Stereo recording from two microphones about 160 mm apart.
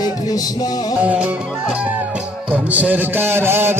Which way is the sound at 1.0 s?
10° right (ahead or behind).